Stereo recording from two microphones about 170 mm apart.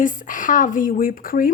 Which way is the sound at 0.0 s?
50° left (ahead or behind).